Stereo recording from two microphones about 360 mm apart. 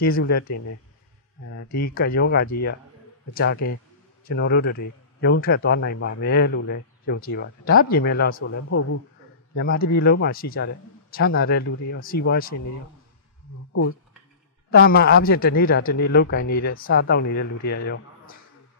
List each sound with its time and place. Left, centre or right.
0.0 s speech: left
0.5 s speech: left
1.8 s speech: left
3.5 s speech: left
4.2 s a man's voice: left
9.6 s speech: left
14.7 s a man's voice: left